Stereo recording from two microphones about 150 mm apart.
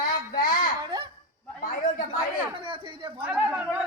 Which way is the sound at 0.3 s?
70° left (ahead or behind).